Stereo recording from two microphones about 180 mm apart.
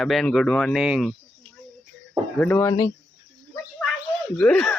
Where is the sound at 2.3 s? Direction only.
10° left (ahead or behind).